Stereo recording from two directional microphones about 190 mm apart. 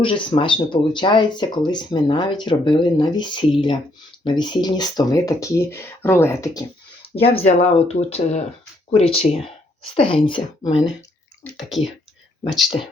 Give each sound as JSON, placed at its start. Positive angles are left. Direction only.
{"t": 0.0, "sound": "speech", "side_deg": 25}
{"t": 7.3, "sound": "speech", "side_deg": 35}
{"t": 11.5, "sound": "speech", "side_deg": 0}